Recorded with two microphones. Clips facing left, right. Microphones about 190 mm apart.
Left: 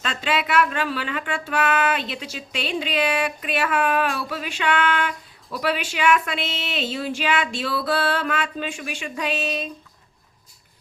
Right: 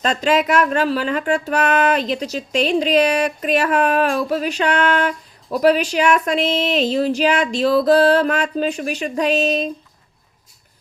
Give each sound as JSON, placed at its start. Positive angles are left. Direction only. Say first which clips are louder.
{"t": 0.0, "sound": "speech", "louder": "right 8 dB", "side_deg": -40}